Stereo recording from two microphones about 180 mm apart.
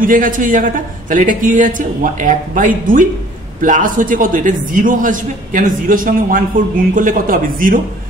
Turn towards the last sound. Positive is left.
turn(degrees=-50)  # may be behind; listen again after turning